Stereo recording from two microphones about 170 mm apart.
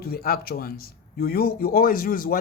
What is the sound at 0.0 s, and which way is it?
Speech, 60° left (ahead or behind).